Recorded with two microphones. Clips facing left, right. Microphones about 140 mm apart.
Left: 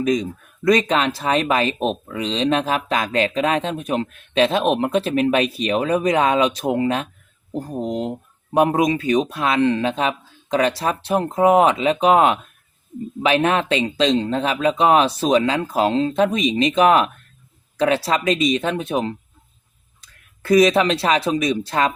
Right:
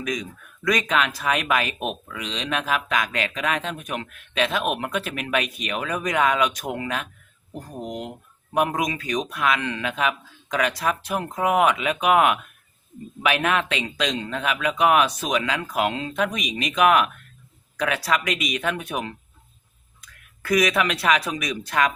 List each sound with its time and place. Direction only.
0.0 s a man's voice: 30° left (ahead or behind)